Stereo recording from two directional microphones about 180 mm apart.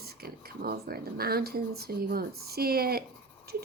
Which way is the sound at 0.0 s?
60° right (ahead or behind).